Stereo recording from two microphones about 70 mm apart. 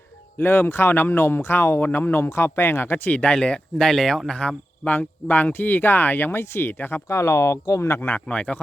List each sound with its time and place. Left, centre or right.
0.3 s speech: left
7.1 s speech: left
8.0 s speech: left